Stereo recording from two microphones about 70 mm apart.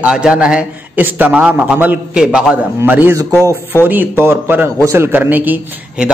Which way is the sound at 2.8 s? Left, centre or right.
Right.